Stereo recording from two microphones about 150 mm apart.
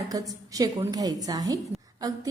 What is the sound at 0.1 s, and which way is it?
A woman's voice, 25° right (ahead or behind).